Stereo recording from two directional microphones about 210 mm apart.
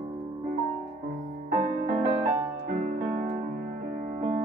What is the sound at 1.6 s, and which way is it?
Music, 40° right (ahead or behind).